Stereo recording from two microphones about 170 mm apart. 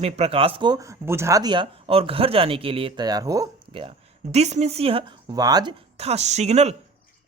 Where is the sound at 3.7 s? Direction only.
35° right (ahead or behind).